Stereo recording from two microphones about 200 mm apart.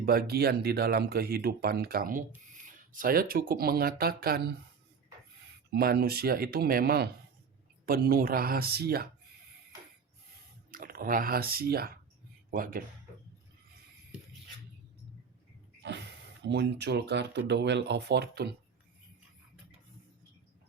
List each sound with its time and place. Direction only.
0.0 s speech: 50° right (ahead or behind)
5.7 s speech: 50° right (ahead or behind)
10.7 s speech: 45° right (ahead or behind)
16.4 s speech: 60° right (ahead or behind)